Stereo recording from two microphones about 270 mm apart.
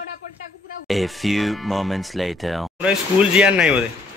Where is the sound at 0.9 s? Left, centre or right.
Centre.